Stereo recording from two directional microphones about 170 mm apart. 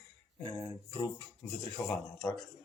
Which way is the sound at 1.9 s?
5° left (ahead or behind).